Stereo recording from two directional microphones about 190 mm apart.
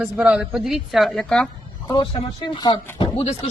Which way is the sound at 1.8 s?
25° left (ahead or behind).